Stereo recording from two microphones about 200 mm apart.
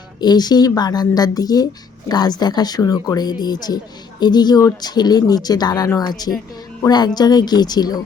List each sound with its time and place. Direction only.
0.2 s speech: 20° left (ahead or behind)